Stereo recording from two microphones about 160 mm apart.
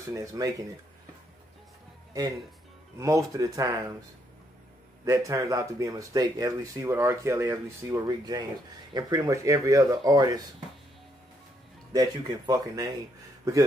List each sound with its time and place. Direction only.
0.1 s speech: 20° right (ahead or behind)
3.0 s speech: 20° right (ahead or behind)
5.0 s speech: 20° right (ahead or behind)
11.9 s speech: 25° right (ahead or behind)